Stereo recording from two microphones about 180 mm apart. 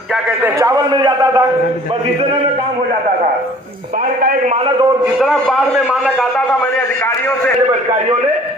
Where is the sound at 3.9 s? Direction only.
50° right (ahead or behind).